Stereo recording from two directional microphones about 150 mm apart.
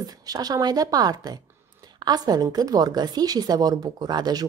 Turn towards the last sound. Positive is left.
turn(degrees=-25)  # may be behind; listen again after turning